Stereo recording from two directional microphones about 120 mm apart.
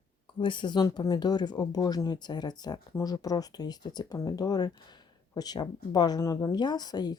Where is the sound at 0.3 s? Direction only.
40° left (ahead or behind).